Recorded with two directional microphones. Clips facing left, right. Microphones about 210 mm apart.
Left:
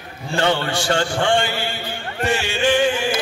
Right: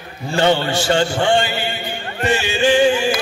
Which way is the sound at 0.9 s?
20° right (ahead or behind).